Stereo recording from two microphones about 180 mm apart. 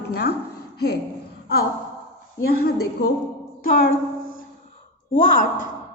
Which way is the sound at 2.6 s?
60° left (ahead or behind).